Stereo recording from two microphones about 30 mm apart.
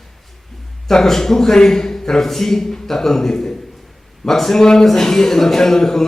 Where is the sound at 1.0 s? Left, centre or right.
Centre.